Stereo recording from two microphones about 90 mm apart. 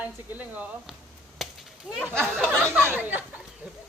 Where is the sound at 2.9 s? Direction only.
20° right (ahead or behind).